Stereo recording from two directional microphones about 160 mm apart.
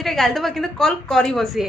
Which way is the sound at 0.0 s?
Centre (ahead or behind).